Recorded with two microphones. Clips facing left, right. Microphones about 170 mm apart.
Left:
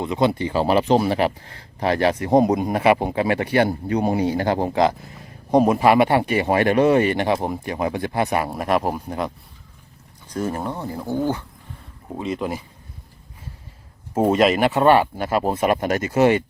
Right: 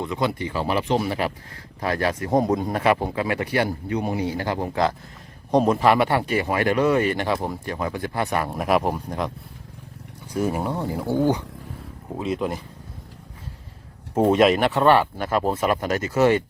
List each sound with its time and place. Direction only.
0.0 s speech: 20° left (ahead or behind)
4.7 s speech: 15° left (ahead or behind)
8.5 s speech: centre (ahead or behind)
10.2 s speech: 10° right (ahead or behind)
12.1 s speech: centre (ahead or behind)
14.1 s speech: 5° left (ahead or behind)